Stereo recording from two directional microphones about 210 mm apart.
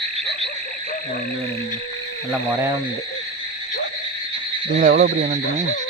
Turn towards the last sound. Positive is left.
turn(degrees=-40)  # may be behind; listen again after turning